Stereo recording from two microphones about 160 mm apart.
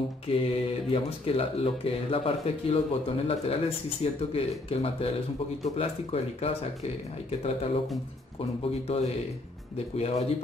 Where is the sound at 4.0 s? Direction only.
35° left (ahead or behind).